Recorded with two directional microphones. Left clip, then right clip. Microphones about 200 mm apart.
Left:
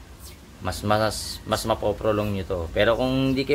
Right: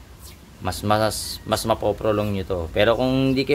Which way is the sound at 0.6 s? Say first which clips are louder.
Right 2 dB; 35° right (ahead or behind).